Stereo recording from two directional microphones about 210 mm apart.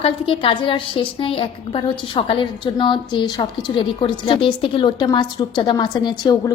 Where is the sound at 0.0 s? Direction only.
25° left (ahead or behind).